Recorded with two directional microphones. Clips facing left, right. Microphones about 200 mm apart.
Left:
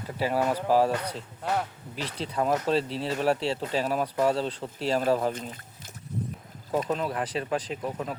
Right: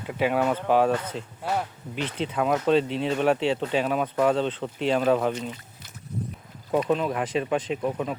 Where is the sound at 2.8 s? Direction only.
35° left (ahead or behind).